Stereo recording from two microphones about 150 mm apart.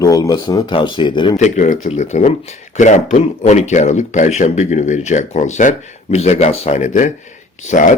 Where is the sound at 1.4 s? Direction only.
50° left (ahead or behind).